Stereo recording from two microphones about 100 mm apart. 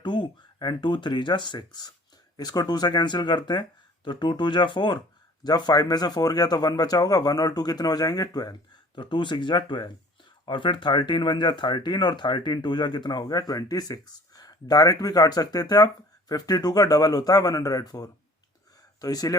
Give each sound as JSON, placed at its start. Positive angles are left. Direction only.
{"t": 0.0, "sound": "speech", "side_deg": 50}
{"t": 9.0, "sound": "speech", "side_deg": 50}